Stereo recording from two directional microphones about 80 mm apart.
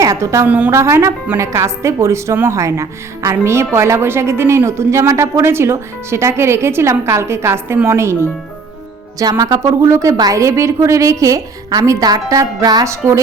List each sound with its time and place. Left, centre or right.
0.0 s a woman's voice: right
0.4 s a woman's voice: centre
0.7 s a woman's voice: right
9.4 s a woman's voice: right